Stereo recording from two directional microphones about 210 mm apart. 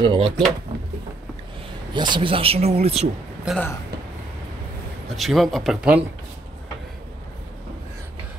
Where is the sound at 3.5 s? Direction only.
5° right (ahead or behind).